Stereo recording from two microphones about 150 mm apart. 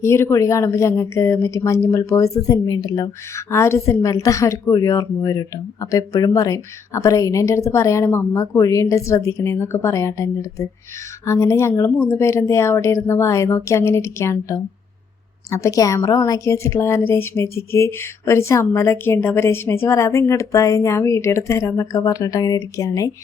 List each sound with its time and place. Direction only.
0.0 s speech: 15° left (ahead or behind)